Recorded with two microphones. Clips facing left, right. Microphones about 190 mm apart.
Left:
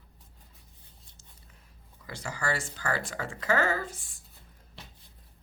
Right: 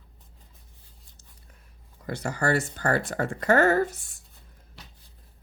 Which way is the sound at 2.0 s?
65° right (ahead or behind).